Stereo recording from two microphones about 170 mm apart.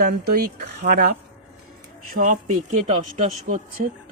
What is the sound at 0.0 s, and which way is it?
Speech, 65° right (ahead or behind).